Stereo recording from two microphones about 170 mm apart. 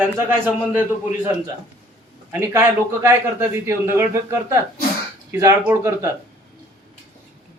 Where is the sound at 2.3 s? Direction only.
15° right (ahead or behind).